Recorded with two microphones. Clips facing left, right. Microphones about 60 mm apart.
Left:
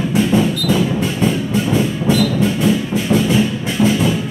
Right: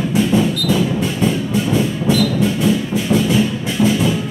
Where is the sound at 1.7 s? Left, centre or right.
Left.